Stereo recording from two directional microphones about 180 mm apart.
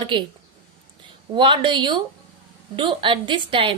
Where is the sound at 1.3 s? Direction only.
30° right (ahead or behind).